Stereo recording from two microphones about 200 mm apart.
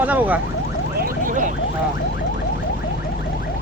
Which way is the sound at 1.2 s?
40° right (ahead or behind).